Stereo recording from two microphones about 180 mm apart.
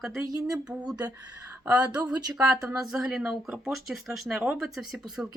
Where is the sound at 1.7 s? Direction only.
20° right (ahead or behind).